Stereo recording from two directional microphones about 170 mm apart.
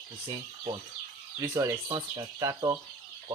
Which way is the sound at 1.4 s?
20° right (ahead or behind).